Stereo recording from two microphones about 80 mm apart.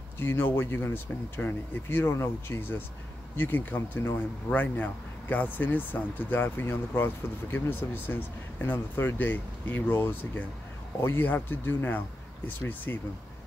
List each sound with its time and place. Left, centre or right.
0.2 s speech: left